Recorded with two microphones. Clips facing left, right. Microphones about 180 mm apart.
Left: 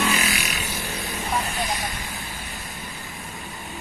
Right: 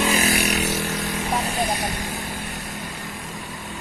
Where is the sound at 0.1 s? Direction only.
35° right (ahead or behind).